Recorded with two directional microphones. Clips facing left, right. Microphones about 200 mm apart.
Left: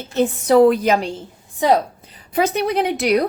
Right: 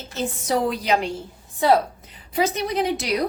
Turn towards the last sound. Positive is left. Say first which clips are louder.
# left 5 dB
turn(degrees=55)  # may be behind; listen again after turning